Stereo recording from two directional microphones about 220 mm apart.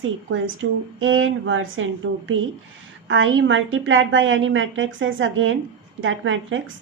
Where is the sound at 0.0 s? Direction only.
65° right (ahead or behind).